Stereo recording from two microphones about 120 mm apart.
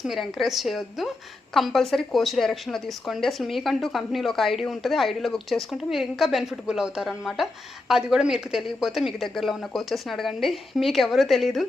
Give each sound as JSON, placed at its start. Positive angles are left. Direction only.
{"t": 0.0, "sound": "speech", "side_deg": 0}